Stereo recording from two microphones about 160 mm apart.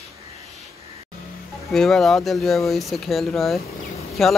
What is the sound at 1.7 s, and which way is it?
Speech, centre (ahead or behind).